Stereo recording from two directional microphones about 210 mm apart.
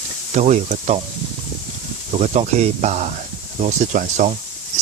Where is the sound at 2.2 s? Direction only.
35° right (ahead or behind).